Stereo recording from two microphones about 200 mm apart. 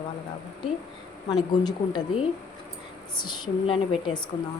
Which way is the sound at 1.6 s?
20° left (ahead or behind).